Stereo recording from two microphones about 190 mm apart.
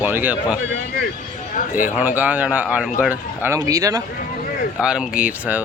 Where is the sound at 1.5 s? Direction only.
45° left (ahead or behind).